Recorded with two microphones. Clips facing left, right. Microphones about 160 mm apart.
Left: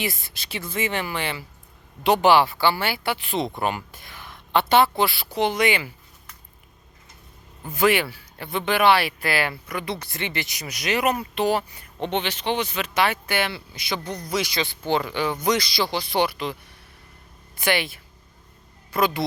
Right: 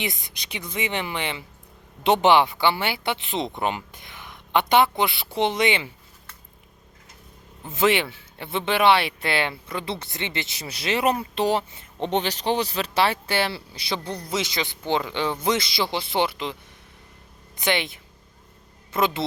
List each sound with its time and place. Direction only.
0.0 s speech: 20° right (ahead or behind)
7.7 s speech: 25° right (ahead or behind)
12.1 s speech: 35° right (ahead or behind); by 16.6 s 20° right (ahead or behind)
17.6 s speech: 20° right (ahead or behind)